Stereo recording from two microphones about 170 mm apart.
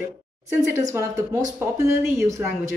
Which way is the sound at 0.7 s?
15° right (ahead or behind).